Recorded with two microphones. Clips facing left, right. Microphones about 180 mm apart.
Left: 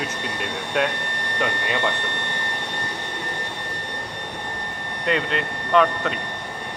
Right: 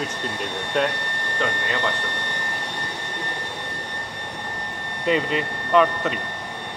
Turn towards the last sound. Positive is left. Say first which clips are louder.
# even
turn(degrees=-5)  # may be behind; listen again after turning